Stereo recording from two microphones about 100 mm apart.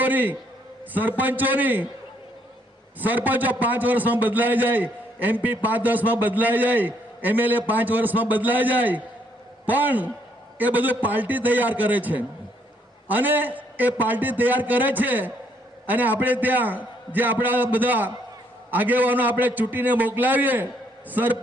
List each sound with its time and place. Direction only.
0.0 s a man's voice: 15° right (ahead or behind)
3.0 s a man's voice: 15° right (ahead or behind)